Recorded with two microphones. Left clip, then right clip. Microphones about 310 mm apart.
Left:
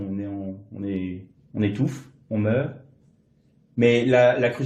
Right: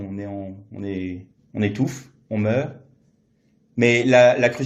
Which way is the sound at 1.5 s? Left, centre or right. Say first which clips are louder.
Right 1 dB; right.